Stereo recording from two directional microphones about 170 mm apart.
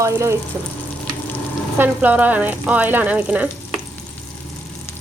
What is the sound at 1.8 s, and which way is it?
Speech, 10° right (ahead or behind).